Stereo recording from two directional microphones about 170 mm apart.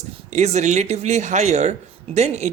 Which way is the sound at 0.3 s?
40° right (ahead or behind).